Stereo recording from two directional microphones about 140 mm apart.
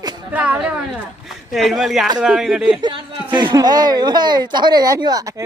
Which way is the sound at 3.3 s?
30° right (ahead or behind).